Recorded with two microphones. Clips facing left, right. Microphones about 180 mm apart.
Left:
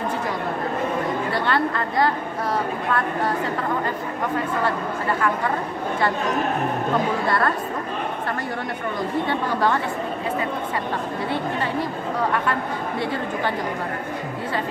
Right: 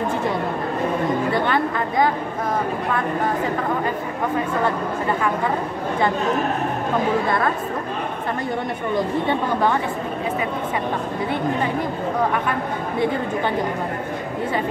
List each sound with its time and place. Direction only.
1.3 s a woman's voice: 15° right (ahead or behind)
7.2 s a woman's voice: 15° right (ahead or behind)
9.3 s a woman's voice: 20° right (ahead or behind)